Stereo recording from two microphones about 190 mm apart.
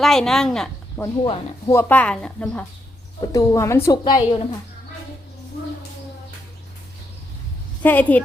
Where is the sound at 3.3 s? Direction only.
15° left (ahead or behind).